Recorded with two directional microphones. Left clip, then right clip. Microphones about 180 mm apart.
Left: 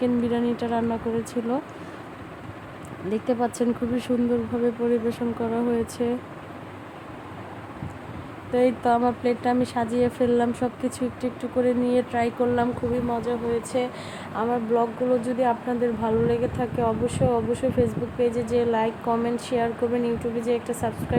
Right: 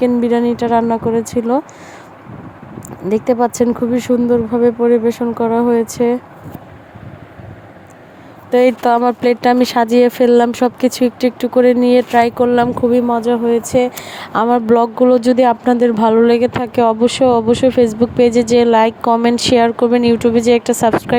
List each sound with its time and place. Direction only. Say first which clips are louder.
0.0 s speech: right 11 dB; 40° right (ahead or behind)
3.1 s speech: right 11 dB; 40° right (ahead or behind)
8.5 s speech: right 10 dB; 55° right (ahead or behind)